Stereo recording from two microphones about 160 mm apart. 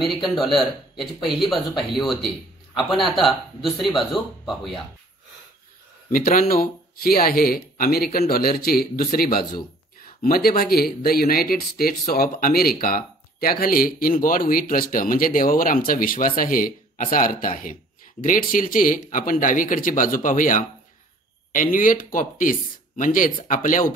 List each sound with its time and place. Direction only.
0.4 s speech: centre (ahead or behind)
6.1 s speech: 60° left (ahead or behind)